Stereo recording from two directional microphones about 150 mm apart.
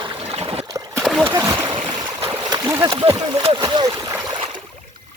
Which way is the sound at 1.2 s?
20° right (ahead or behind).